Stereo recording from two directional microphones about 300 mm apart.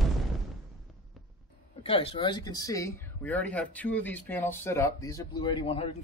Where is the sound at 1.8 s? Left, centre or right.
Centre.